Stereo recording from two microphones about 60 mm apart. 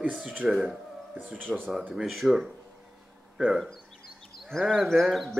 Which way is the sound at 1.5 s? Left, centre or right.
Centre.